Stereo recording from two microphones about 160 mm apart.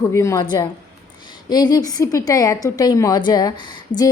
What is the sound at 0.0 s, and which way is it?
Speech, 20° left (ahead or behind).